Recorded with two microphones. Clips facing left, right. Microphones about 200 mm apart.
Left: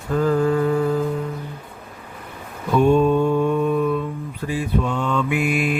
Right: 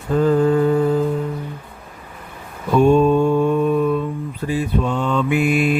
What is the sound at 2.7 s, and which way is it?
Mantra, 35° right (ahead or behind).